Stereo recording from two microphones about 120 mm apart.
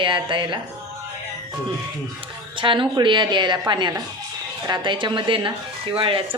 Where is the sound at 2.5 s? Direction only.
45° right (ahead or behind).